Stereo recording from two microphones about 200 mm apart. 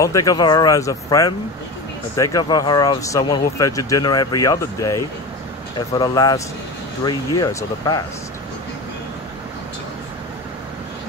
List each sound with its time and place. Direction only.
0.0 s speech: 15° left (ahead or behind)